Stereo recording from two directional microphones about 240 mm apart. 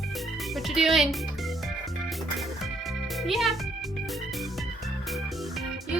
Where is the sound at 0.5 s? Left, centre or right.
Centre.